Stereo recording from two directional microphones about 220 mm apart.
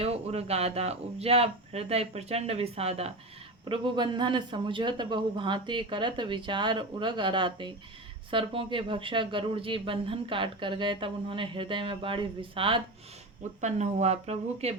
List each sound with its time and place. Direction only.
0.0 s speech: 30° right (ahead or behind)